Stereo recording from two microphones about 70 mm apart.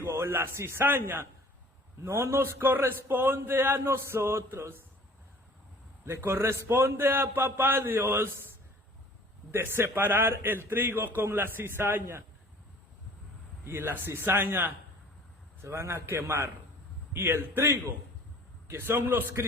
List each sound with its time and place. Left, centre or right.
0.0 s a man's voice: right
6.1 s a man's voice: right
9.5 s a man's voice: right
13.7 s a man's voice: right
15.6 s a man's voice: right